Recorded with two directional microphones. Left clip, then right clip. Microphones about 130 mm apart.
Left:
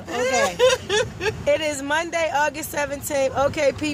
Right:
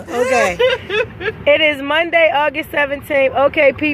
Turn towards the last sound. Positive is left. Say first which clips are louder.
# right 8 dB
turn(degrees=-5)  # may be behind; listen again after turning